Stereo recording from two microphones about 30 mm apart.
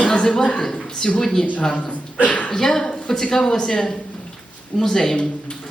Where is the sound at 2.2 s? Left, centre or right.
Left.